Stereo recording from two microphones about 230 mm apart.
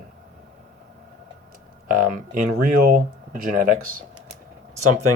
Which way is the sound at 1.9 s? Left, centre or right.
Right.